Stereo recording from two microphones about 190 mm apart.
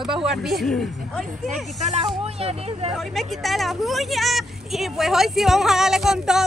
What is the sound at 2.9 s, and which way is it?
Speech, centre (ahead or behind).